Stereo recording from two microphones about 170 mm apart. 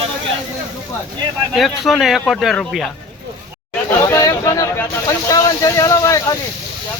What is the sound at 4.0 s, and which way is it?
Speech, 15° left (ahead or behind).